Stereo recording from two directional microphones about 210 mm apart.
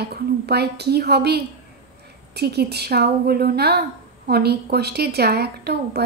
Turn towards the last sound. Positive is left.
turn(degrees=-50)  # may be behind; listen again after turning